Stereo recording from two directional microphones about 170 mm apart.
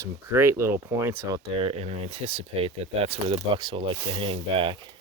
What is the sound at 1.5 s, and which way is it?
Speech, 35° right (ahead or behind).